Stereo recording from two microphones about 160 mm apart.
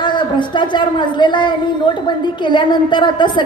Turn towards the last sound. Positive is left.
turn(degrees=30)  # may be behind; listen again after turning